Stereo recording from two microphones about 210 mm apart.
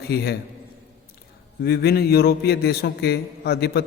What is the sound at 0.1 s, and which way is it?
Speech, 50° left (ahead or behind).